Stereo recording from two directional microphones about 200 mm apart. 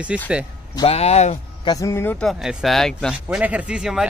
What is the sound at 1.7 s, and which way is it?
Speech, 15° left (ahead or behind).